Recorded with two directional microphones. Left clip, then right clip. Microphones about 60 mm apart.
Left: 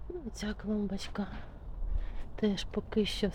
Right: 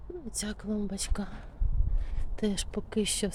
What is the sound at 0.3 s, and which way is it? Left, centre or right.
A woman's voice, right.